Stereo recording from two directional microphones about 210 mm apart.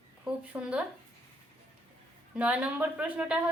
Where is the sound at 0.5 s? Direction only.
10° right (ahead or behind).